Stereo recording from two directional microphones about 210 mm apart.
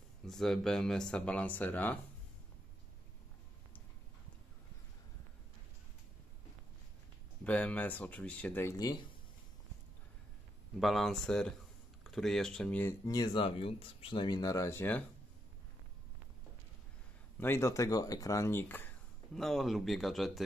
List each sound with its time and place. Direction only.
0.3 s speech: centre (ahead or behind)
7.4 s speech: 5° left (ahead or behind)
10.8 s speech: centre (ahead or behind)
17.4 s speech: 10° left (ahead or behind)